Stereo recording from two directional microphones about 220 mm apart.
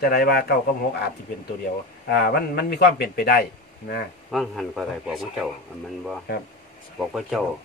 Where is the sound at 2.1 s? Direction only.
45° left (ahead or behind).